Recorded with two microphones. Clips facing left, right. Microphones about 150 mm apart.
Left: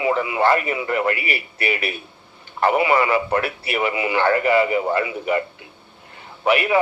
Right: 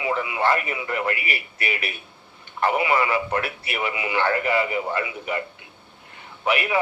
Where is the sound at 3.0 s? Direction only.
55° left (ahead or behind).